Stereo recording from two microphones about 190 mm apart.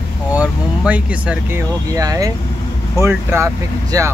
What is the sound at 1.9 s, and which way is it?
Speech, 20° right (ahead or behind).